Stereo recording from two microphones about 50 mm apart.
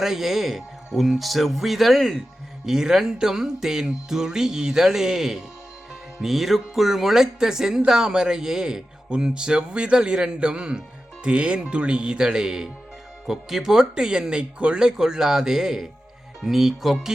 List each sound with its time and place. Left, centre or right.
0.0 s speech: centre
2.6 s a man's voice: centre